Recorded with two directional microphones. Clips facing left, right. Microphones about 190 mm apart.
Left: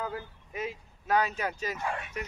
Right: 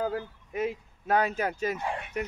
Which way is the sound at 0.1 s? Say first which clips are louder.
Right 5 dB; 55° right (ahead or behind).